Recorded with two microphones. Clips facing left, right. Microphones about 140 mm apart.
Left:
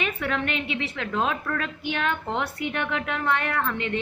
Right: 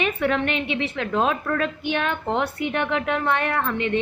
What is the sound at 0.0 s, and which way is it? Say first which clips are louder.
A woman's voice: right 5 dB; 30° right (ahead or behind).